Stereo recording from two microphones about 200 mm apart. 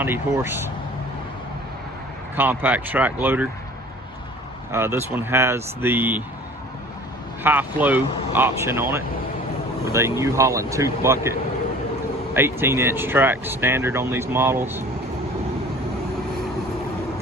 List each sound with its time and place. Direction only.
0.0 s speech: 10° right (ahead or behind)
2.3 s speech: 10° right (ahead or behind)
4.7 s speech: 10° right (ahead or behind)
7.4 s speech: 10° right (ahead or behind)